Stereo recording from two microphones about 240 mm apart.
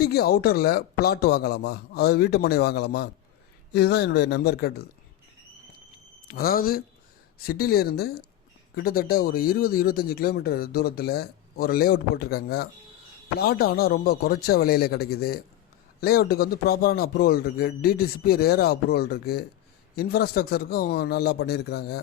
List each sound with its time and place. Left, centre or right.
0.0 s a man's voice: left
6.2 s speech: left